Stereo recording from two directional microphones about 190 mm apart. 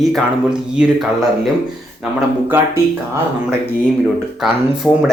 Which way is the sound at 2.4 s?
10° right (ahead or behind).